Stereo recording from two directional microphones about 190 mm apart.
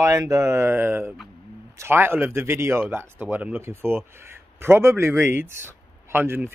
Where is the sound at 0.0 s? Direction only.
15° right (ahead or behind).